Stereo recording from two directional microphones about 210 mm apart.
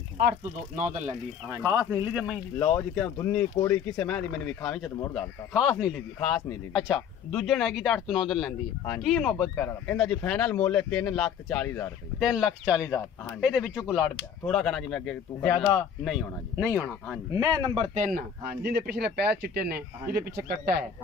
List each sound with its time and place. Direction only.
0.7 s speech: 35° right (ahead or behind)
1.5 s speech: 15° right (ahead or behind)
3.3 s speech: 10° left (ahead or behind)
12.2 s speech: 5° right (ahead or behind)
13.7 s speech: 15° left (ahead or behind)
14.4 s speech: centre (ahead or behind); by 17.6 s 20° right (ahead or behind)
17.7 s speech: 30° right (ahead or behind)